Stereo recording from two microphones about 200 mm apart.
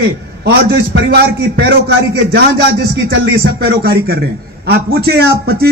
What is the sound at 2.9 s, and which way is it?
A man's voice, 55° right (ahead or behind).